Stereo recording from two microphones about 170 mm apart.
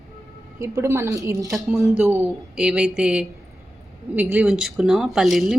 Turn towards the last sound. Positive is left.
turn(degrees=0)  # may be behind; listen again after turning